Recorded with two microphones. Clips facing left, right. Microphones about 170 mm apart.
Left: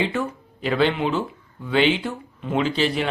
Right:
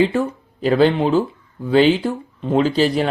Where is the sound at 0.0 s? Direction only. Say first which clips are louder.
Right 7 dB; 35° right (ahead or behind).